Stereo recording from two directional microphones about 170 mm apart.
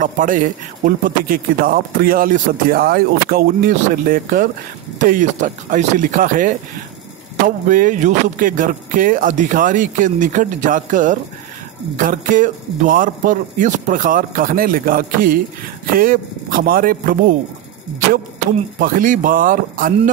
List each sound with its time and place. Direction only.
0.0 s a man's voice: 50° right (ahead or behind)
18.8 s speech: 50° right (ahead or behind)